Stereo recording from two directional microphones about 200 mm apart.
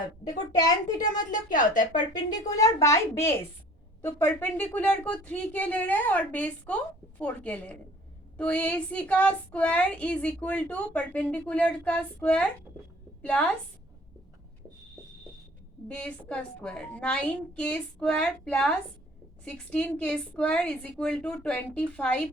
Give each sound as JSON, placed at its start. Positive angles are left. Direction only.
{"t": 0.6, "sound": "a child's voice", "side_deg": 20}
{"t": 1.2, "sound": "a woman's voice", "side_deg": 40}
{"t": 2.5, "sound": "a woman's voice", "side_deg": 15}
{"t": 15.9, "sound": "a woman's voice", "side_deg": 5}